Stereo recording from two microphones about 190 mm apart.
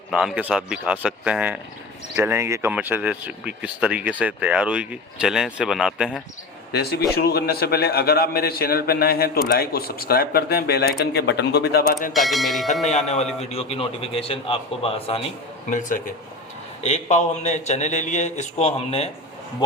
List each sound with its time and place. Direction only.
0.1 s speech: 5° right (ahead or behind)
6.7 s a man's voice: 55° left (ahead or behind)
12.1 s speech: centre (ahead or behind)
12.8 s a man's voice: 35° left (ahead or behind)
15.7 s a man's voice: 45° left (ahead or behind)